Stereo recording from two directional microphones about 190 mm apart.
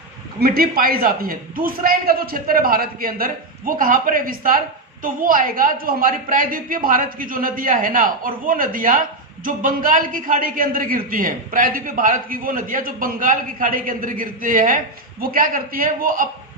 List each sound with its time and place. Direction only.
0.3 s a woman's voice: 50° right (ahead or behind)